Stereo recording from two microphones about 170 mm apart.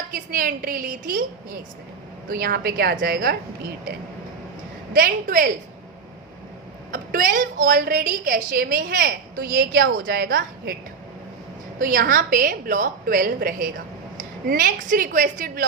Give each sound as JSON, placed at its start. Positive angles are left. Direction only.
{"t": 0.1, "sound": "a woman's voice", "side_deg": -55}
{"t": 2.3, "sound": "a woman's voice", "side_deg": -60}
{"t": 4.9, "sound": "a woman's voice", "side_deg": -60}
{"t": 6.9, "sound": "a woman's voice", "side_deg": -55}
{"t": 11.8, "sound": "a woman's voice", "side_deg": -55}